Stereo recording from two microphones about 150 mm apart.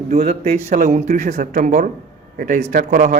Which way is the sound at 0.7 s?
55° right (ahead or behind).